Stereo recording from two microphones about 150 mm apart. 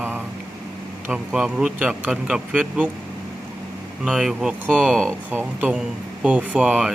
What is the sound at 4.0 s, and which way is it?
Speech, 5° right (ahead or behind).